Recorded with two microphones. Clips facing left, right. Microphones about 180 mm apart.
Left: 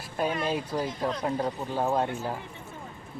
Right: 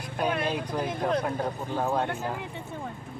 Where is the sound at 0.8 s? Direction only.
60° right (ahead or behind).